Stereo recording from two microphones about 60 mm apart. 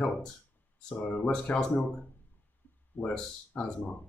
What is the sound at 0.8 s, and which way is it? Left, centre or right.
Speech, left.